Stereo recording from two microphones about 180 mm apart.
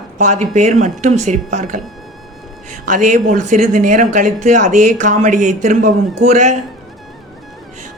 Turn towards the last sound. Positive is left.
turn(degrees=-40)  # may be behind; listen again after turning